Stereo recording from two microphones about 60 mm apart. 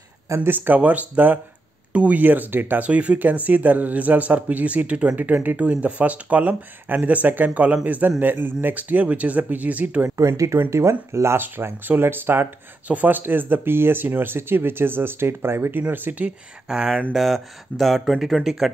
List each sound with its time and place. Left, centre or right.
0.5 s speech: right
2.9 s speech: right
10.1 s speech: right
11.4 s speech: right
12.8 s speech: right
16.3 s speech: centre
17.1 s speech: centre